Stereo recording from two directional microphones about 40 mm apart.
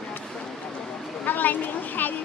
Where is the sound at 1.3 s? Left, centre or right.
Left.